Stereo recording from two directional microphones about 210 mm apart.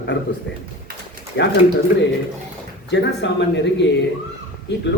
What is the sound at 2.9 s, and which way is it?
A man's voice, 55° left (ahead or behind).